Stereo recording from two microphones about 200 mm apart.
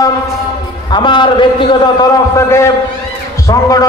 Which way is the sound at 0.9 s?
20° left (ahead or behind).